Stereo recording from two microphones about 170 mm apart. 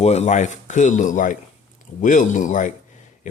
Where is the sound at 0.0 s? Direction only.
40° left (ahead or behind).